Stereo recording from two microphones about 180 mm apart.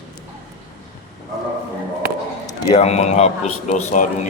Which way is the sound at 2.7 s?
35° left (ahead or behind).